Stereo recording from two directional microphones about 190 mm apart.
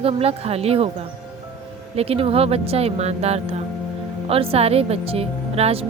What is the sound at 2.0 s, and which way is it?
Speech, 30° right (ahead or behind).